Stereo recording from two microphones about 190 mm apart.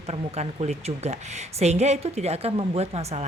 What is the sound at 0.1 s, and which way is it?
A woman's voice, 35° right (ahead or behind).